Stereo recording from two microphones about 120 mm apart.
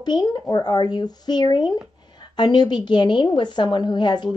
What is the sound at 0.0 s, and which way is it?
A woman's voice, 35° left (ahead or behind).